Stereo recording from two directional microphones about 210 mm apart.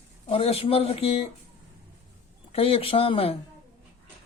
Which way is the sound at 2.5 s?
25° left (ahead or behind).